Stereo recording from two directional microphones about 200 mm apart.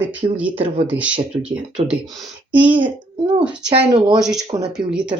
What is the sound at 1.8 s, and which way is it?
Speech, 30° right (ahead or behind).